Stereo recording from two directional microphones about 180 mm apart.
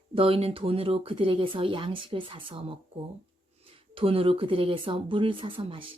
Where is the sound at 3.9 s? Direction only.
30° right (ahead or behind).